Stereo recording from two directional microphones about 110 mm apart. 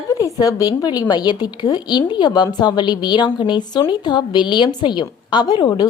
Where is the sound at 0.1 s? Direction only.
30° left (ahead or behind).